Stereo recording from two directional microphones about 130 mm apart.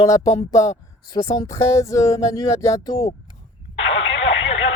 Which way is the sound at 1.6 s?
25° left (ahead or behind).